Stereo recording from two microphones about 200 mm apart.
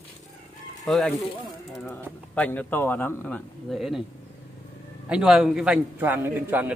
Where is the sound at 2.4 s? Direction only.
10° left (ahead or behind).